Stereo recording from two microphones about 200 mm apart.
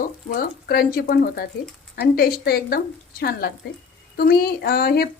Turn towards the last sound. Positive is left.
turn(degrees=50)  # may be behind; listen again after turning